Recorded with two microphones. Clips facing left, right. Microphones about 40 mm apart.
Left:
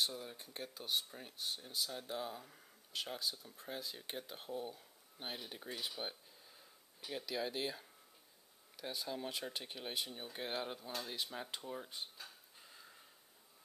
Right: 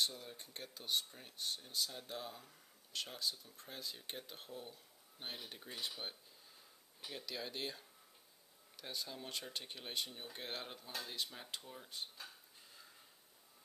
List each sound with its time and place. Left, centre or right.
0.0 s speech: centre
12.0 s dog: centre